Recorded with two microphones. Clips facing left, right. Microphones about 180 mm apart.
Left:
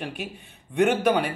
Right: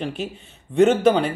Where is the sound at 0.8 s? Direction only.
25° right (ahead or behind).